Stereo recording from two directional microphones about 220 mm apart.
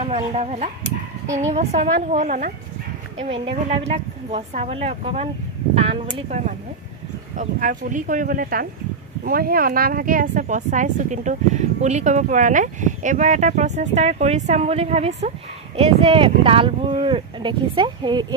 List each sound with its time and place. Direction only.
0.0 s speech: 25° right (ahead or behind)
3.2 s speech: 25° right (ahead or behind)